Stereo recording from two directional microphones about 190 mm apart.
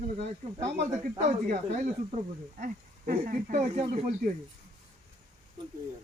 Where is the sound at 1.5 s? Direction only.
45° right (ahead or behind).